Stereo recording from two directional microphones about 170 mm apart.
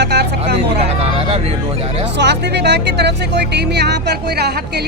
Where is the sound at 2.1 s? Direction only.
80° right.